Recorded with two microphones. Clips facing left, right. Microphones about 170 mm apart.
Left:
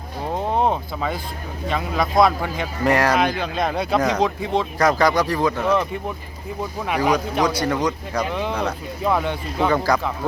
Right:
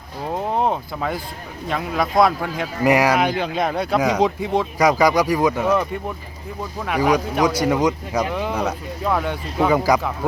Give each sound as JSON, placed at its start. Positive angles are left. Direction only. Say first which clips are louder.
{"t": 0.6, "sound": "a sound", "louder": "even", "side_deg": -5}
{"t": 1.7, "sound": "speech", "louder": "even", "side_deg": -5}
{"t": 5.6, "sound": "speech", "louder": "right 1 dB", "side_deg": -5}
{"t": 7.6, "sound": "speech", "louder": "right 3 dB", "side_deg": -20}
{"t": 8.3, "sound": "speech", "louder": "right 1 dB", "side_deg": -5}